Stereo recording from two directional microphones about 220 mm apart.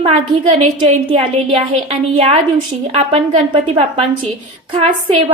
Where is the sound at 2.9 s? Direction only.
25° right (ahead or behind).